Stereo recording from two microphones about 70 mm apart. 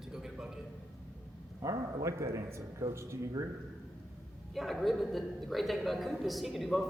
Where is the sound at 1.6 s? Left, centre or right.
Right.